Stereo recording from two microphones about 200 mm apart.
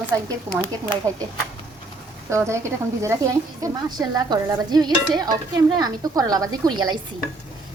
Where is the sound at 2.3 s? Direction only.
15° right (ahead or behind).